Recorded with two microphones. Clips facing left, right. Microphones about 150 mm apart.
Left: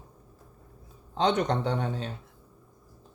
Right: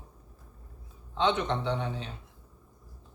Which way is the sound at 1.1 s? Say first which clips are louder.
Left 2 dB; 40° left (ahead or behind).